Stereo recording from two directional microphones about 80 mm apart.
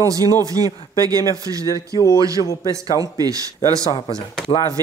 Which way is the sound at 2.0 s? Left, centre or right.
Left.